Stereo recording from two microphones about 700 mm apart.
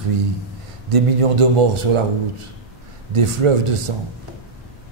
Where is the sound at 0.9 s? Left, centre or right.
Right.